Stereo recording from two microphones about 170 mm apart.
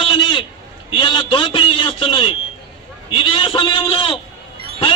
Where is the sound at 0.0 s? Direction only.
30° left (ahead or behind).